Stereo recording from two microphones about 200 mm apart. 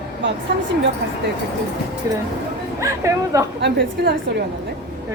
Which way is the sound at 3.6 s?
60° right (ahead or behind).